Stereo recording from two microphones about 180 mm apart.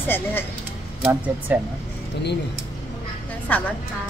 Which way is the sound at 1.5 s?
10° right (ahead or behind).